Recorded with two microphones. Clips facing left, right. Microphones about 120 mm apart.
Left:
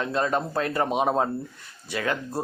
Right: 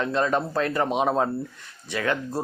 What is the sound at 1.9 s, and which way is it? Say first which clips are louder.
Speech: right 2 dB; 30° left (ahead or behind).